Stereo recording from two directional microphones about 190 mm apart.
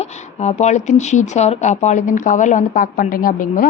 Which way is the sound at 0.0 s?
35° left (ahead or behind).